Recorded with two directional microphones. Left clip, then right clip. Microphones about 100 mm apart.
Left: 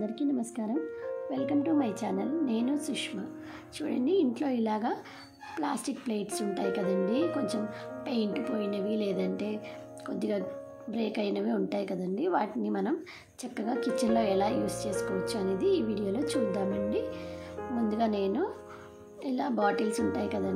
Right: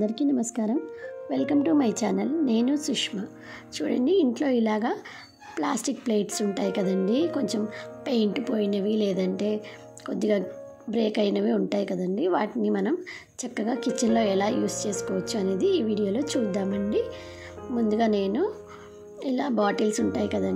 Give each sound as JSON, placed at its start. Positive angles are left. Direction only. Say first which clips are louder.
{"t": 0.0, "sound": "speech", "louder": "right 6 dB", "side_deg": -60}
{"t": 1.3, "sound": "a woman's voice", "louder": "right 6 dB", "side_deg": -80}
{"t": 17.7, "sound": "a woman's voice", "louder": "right 6 dB", "side_deg": -55}